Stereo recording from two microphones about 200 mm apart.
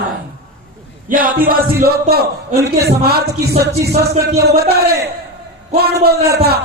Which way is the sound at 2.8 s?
50° right (ahead or behind).